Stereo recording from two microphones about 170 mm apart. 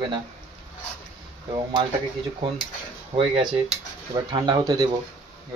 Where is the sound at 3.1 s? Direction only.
30° right (ahead or behind).